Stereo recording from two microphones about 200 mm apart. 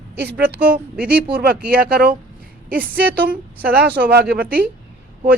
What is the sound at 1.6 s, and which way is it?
Speech, 50° right (ahead or behind).